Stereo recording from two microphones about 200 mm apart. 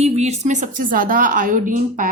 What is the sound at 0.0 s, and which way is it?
A woman's voice, 30° right (ahead or behind).